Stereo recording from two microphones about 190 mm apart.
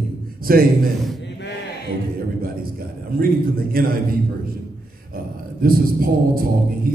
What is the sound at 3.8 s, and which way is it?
Speech, 50° right (ahead or behind).